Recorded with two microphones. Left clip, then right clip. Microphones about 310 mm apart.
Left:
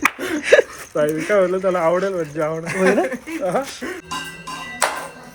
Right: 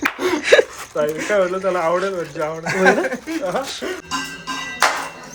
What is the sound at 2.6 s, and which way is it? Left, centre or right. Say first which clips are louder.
Speech: right 4 dB; centre.